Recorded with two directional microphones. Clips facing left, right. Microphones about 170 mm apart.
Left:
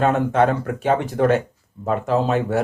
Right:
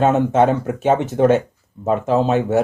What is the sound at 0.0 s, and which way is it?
Speech, 20° right (ahead or behind).